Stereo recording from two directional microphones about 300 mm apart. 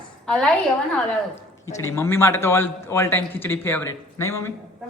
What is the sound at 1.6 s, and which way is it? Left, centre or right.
A man's voice, centre.